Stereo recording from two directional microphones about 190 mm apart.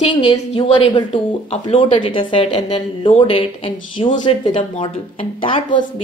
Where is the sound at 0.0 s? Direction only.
25° left (ahead or behind).